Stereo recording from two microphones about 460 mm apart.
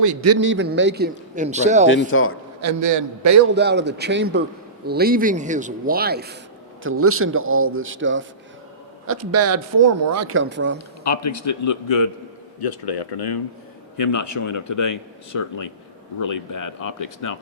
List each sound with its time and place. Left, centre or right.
0.0 s a man's voice: right
0.3 s a man's voice: right
2.1 s a man's voice: left
2.6 s a man's voice: right
3.5 s a man's voice: right
11.0 s speech: left
12.5 s speech: left
14.0 s speech: left
16.2 s speech: left